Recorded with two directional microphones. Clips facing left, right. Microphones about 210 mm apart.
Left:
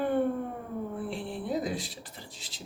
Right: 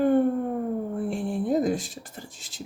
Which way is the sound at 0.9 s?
45° right (ahead or behind).